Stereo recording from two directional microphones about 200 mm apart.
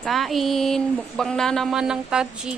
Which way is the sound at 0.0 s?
Centre (ahead or behind).